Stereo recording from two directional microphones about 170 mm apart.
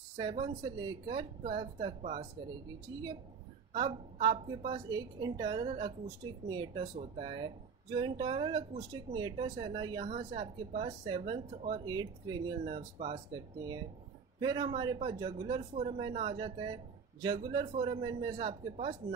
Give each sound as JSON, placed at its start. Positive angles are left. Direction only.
{"t": 0.2, "sound": "speech", "side_deg": -25}
{"t": 10.1, "sound": "speech", "side_deg": -35}